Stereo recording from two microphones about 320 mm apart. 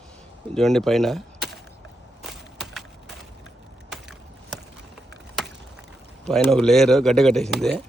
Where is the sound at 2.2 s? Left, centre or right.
Centre.